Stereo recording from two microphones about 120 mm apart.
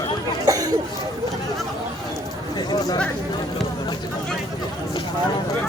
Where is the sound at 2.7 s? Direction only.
35° left (ahead or behind).